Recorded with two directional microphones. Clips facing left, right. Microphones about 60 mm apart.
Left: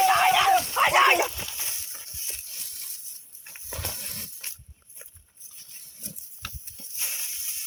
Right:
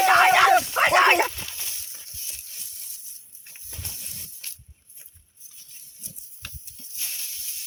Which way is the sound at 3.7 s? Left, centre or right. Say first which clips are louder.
Left 7 dB; left.